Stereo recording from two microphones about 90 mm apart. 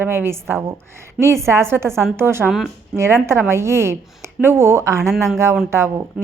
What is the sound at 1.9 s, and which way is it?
Speech, 5° left (ahead or behind).